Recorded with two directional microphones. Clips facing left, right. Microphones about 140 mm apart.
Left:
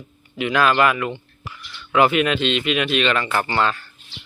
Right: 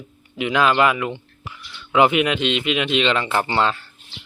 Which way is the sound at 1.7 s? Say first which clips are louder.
Even; 5° right (ahead or behind).